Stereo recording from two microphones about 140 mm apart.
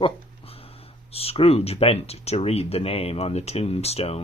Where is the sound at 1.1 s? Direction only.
45° left (ahead or behind).